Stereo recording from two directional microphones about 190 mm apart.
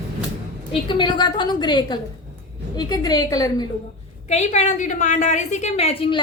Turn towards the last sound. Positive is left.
turn(degrees=30)  # may be behind; listen again after turning